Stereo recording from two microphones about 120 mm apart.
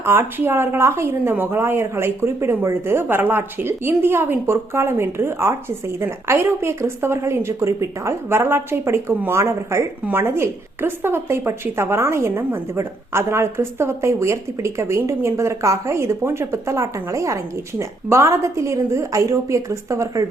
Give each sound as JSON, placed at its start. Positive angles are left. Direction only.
{"t": 0.0, "sound": "a woman's voice", "side_deg": -20}